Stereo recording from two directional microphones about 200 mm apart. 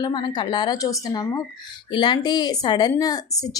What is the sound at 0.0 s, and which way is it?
A woman's voice, 20° left (ahead or behind).